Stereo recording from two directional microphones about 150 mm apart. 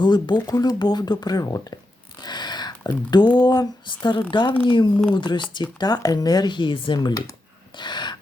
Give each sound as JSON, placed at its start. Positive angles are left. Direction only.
{"t": 0.0, "sound": "speech", "side_deg": 30}
{"t": 2.2, "sound": "a sound", "side_deg": 30}
{"t": 3.3, "sound": "speech", "side_deg": 30}
{"t": 7.8, "sound": "gasp", "side_deg": 30}